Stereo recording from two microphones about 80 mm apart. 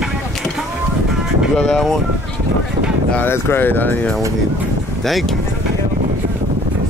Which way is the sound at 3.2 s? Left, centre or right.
Left.